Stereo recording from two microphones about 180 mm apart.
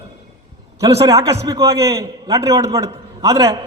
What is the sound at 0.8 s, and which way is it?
A man's voice, 20° right (ahead or behind).